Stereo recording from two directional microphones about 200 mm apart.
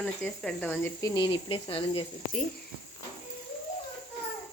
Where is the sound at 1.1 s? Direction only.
25° left (ahead or behind).